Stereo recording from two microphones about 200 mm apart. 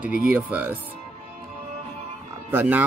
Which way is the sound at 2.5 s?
10° right (ahead or behind).